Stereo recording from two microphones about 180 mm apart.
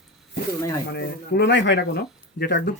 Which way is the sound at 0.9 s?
60° left (ahead or behind).